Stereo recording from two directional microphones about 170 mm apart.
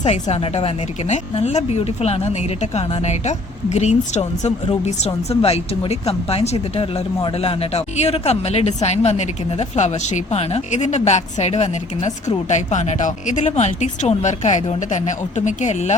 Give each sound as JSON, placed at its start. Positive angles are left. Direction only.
{"t": 0.0, "sound": "speech", "side_deg": 40}